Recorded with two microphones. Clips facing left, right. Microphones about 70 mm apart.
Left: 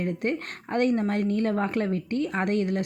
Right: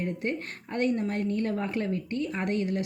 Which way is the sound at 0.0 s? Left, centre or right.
Left.